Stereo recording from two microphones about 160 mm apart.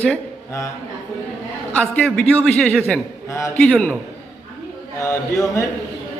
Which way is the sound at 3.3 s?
20° left (ahead or behind).